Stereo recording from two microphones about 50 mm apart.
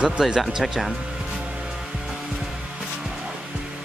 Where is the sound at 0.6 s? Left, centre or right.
Centre.